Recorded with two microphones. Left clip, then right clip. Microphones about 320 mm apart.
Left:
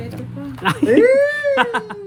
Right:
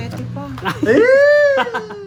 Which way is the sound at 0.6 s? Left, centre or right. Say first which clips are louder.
Left 3 dB; left.